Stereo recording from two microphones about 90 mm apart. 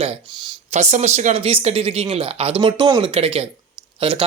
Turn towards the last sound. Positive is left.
turn(degrees=-80)